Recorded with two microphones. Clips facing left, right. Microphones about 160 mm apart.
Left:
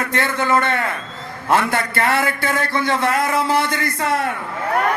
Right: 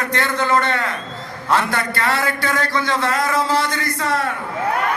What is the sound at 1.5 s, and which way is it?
A man's voice, 50° left (ahead or behind).